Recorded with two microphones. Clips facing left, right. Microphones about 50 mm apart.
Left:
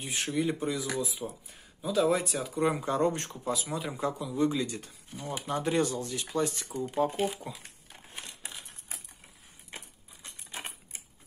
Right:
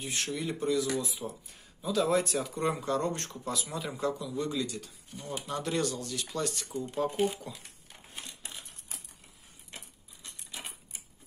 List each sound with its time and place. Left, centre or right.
0.0 s speech: centre
1.0 s speech: centre
2.7 s speech: centre
7.9 s a sound: left